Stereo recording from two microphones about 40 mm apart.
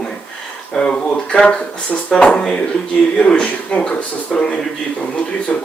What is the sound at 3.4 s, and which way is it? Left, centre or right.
Speech, left.